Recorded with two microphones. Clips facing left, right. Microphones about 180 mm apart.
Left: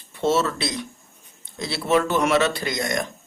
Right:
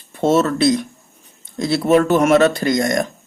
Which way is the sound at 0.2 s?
50° right (ahead or behind).